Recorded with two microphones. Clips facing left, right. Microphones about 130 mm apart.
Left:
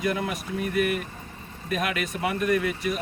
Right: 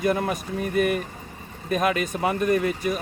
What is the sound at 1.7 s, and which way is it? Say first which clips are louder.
Speech: right 5 dB; 35° right (ahead or behind).